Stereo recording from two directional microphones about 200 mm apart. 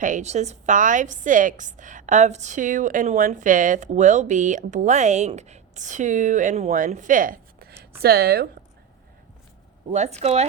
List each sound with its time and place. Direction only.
0.0 s a woman's voice: 35° right (ahead or behind)
9.9 s a woman's voice: 35° right (ahead or behind)